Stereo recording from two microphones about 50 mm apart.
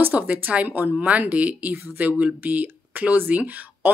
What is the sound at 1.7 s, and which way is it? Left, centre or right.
Speech, right.